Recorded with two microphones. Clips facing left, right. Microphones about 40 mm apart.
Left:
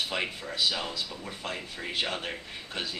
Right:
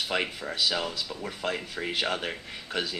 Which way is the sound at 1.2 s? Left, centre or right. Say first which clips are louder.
Right 5 dB; right.